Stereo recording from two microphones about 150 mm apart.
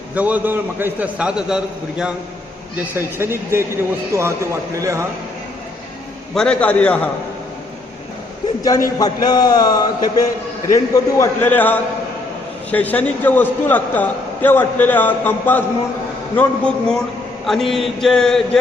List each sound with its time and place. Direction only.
0.1 s a man's voice: 10° right (ahead or behind)
6.3 s a man's voice: 5° left (ahead or behind)
9.0 s a man's voice: 25° left (ahead or behind); by 17.0 s 10° left (ahead or behind)
17.4 s mantra: centre (ahead or behind)